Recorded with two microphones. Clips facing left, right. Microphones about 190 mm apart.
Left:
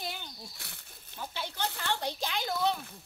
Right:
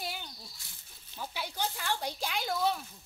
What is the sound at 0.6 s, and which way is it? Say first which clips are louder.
Speech: left 8 dB; 65° left (ahead or behind).